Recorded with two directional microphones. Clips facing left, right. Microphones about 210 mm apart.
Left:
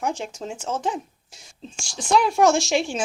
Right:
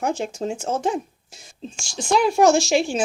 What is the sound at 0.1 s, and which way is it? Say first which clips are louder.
Speech: right 5 dB; 5° right (ahead or behind).